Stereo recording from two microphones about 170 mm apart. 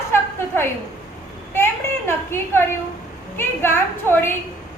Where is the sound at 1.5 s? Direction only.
15° left (ahead or behind).